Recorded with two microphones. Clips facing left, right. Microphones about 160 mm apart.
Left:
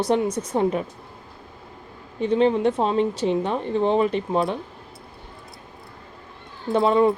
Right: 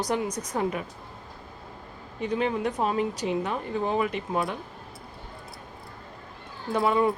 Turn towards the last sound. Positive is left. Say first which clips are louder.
# left 5 dB
turn(degrees=25)  # may be behind; listen again after turning